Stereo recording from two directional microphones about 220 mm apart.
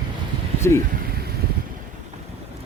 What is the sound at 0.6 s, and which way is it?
Speech, 10° left (ahead or behind).